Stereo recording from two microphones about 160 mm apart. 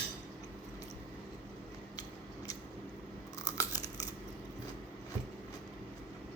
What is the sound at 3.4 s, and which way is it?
Chewing, 20° left (ahead or behind).